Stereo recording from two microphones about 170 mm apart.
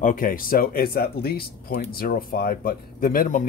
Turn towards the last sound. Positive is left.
turn(degrees=50)  # may be behind; listen again after turning